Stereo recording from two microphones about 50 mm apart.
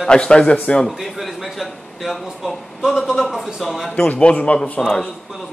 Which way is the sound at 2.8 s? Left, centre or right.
Centre.